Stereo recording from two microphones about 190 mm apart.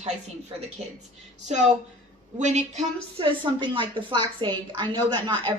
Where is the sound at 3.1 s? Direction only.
25° right (ahead or behind).